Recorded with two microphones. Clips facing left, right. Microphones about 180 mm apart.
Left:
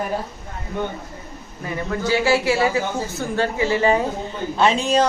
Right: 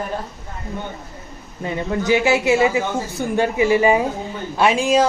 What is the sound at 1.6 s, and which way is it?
A man's voice, 20° right (ahead or behind).